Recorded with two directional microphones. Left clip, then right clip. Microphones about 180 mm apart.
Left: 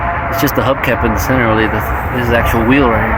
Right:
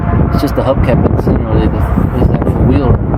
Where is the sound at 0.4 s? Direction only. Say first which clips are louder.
Even; 5° right (ahead or behind).